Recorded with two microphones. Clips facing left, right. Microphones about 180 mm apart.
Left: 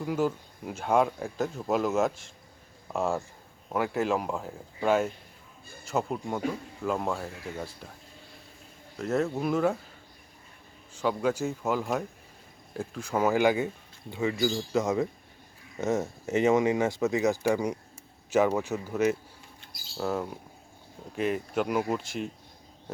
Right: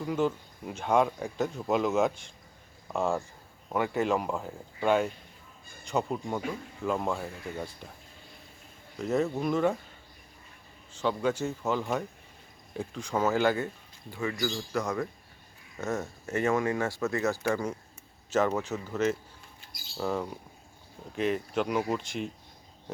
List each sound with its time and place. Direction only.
0.0 s speech: 5° left (ahead or behind)
9.0 s speech: centre (ahead or behind)
10.9 s speech: 5° left (ahead or behind)